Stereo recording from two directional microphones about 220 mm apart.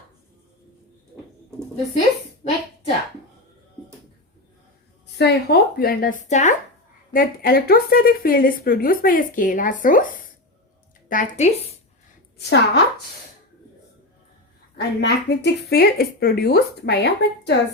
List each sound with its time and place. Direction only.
2.4 s a sound: 30° left (ahead or behind)
5.1 s a woman's voice: 50° left (ahead or behind)
11.1 s a woman's voice: 35° left (ahead or behind)
12.4 s speech: 50° left (ahead or behind)
14.8 s speech: 50° left (ahead or behind)